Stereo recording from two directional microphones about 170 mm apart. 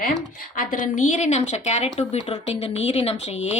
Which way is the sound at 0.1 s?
55° left (ahead or behind).